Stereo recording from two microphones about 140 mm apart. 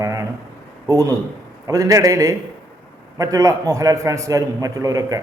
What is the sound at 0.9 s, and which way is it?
A man's voice, 25° right (ahead or behind).